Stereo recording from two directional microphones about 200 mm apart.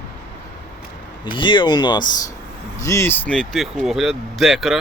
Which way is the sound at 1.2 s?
25° left (ahead or behind).